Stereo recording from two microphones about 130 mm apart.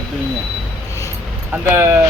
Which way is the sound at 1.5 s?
15° right (ahead or behind).